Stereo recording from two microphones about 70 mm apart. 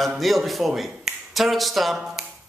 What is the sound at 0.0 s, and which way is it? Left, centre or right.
Speech, centre.